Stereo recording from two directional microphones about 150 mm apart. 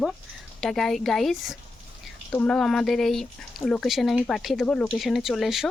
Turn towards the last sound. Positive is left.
turn(degrees=0)  # may be behind; listen again after turning